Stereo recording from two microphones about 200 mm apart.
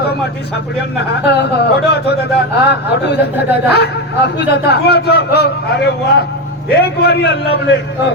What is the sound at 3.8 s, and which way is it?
Speech, 55° left (ahead or behind).